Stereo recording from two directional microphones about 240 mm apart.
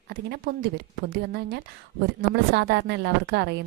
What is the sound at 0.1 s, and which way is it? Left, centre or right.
A woman's voice, right.